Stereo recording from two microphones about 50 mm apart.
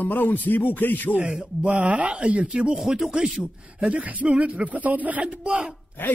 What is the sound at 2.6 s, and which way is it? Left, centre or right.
Speech, centre.